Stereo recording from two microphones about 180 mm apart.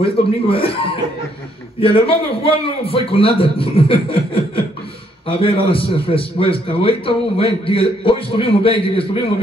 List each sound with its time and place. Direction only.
0.0 s a man's voice: 30° left (ahead or behind)
1.8 s a man's voice: 30° left (ahead or behind)